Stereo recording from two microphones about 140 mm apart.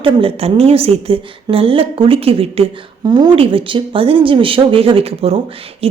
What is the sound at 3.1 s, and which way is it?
A woman's voice, 30° right (ahead or behind).